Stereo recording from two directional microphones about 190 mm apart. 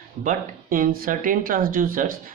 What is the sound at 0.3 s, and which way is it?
Speech, 45° right (ahead or behind).